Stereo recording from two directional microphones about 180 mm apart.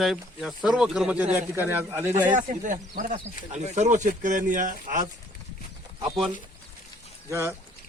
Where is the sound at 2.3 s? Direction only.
45° right (ahead or behind).